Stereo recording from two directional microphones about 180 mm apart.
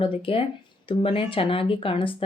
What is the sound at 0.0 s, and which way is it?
A woman's voice, 30° left (ahead or behind).